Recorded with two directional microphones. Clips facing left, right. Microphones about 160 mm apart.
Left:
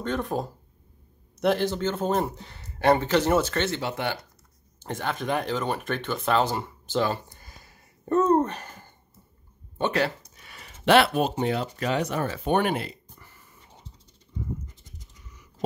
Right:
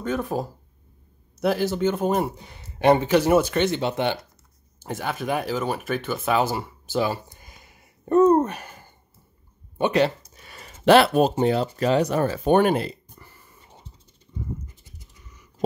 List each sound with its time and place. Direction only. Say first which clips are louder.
0.0 s speech: right 2 dB; 5° right (ahead or behind); by 4.2 s 20° right (ahead or behind)
4.7 s speech: right 1 dB; 10° right (ahead or behind)
10.3 s speech: right 3 dB; 40° right (ahead or behind)